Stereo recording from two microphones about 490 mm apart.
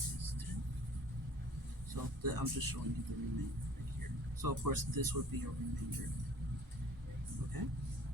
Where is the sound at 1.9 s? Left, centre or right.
Right.